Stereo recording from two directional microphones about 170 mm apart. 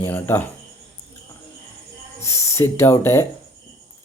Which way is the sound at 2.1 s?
15° left (ahead or behind).